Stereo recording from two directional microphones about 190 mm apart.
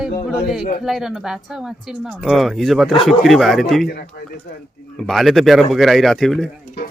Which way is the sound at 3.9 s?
55° left (ahead or behind).